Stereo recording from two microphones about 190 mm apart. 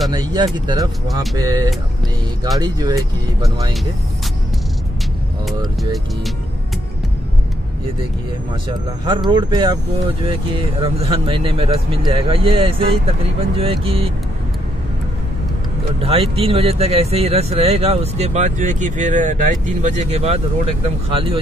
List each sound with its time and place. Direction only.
0.1 s speech: 25° right (ahead or behind)
9.0 s speech: 25° right (ahead or behind)
16.0 s speech: 30° right (ahead or behind)